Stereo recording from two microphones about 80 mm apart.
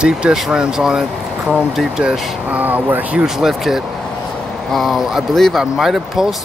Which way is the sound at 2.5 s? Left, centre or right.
Right.